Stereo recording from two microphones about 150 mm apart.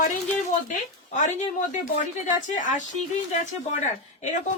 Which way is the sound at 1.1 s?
55° left (ahead or behind).